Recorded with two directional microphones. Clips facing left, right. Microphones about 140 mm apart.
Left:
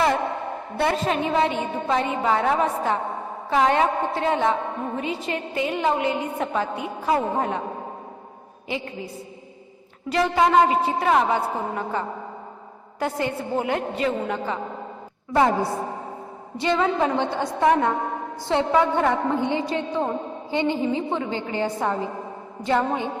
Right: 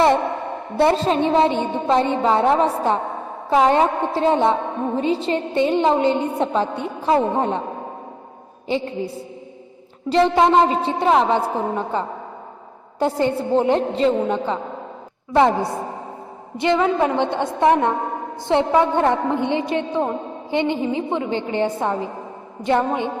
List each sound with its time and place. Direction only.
0.8 s a woman's voice: 30° right (ahead or behind)
8.6 s a woman's voice: 30° right (ahead or behind)
10.1 s a woman's voice: 30° right (ahead or behind)
16.6 s a woman's voice: 20° right (ahead or behind)